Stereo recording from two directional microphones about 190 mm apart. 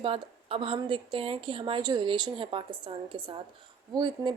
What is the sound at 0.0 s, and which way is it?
Speech, 30° right (ahead or behind).